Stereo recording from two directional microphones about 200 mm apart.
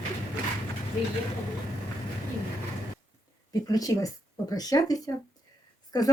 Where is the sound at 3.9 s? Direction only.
15° left (ahead or behind).